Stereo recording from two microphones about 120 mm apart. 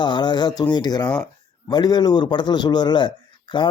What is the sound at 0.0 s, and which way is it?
Speech, 40° left (ahead or behind).